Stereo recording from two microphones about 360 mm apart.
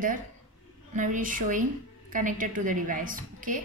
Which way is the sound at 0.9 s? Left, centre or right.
Right.